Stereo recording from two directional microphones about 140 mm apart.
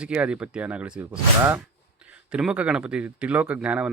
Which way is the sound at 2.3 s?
5° right (ahead or behind).